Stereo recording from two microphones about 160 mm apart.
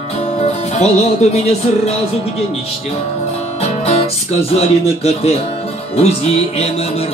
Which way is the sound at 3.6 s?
40° left (ahead or behind).